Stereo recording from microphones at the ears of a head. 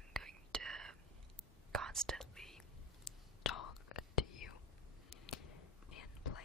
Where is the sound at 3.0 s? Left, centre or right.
Left.